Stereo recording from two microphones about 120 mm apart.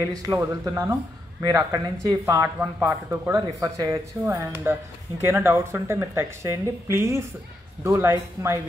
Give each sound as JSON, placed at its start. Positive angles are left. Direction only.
{"t": 0.1, "sound": "speech", "side_deg": -30}